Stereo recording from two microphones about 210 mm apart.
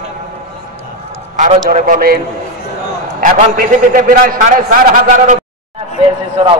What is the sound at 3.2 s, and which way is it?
A man's voice, 40° right (ahead or behind).